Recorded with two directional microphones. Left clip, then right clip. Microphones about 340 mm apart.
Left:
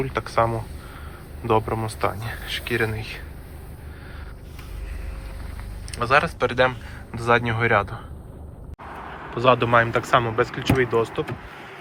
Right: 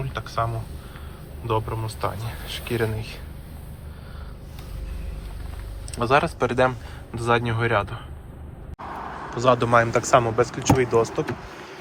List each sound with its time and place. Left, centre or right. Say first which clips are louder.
0.0 s speech: left 5 dB; centre
6.0 s speech: left 1 dB; centre
8.8 s a sound: right 3 dB; right
9.3 s speech: left 1 dB; centre